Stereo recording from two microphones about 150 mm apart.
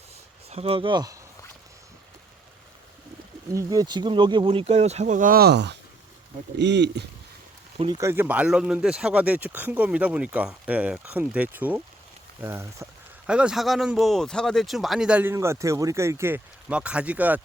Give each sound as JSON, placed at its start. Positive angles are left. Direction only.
{"t": 0.5, "sound": "speech", "side_deg": -40}
{"t": 3.5, "sound": "speech", "side_deg": -25}
{"t": 7.9, "sound": "speech", "side_deg": -15}